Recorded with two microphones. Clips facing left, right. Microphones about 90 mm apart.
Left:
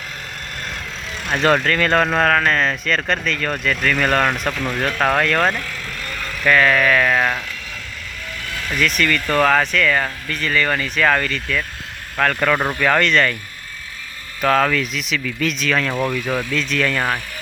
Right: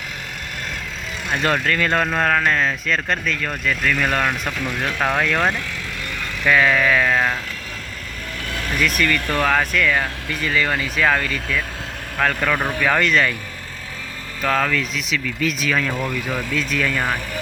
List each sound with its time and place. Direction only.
1.3 s speech: centre (ahead or behind)
7.1 s speech: centre (ahead or behind)
8.4 s vehicle: 50° right (ahead or behind)
9.0 s speech: 10° right (ahead or behind)
14.4 s speech: 5° left (ahead or behind)